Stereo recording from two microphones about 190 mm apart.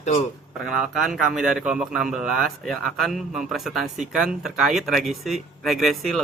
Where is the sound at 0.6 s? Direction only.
Centre (ahead or behind).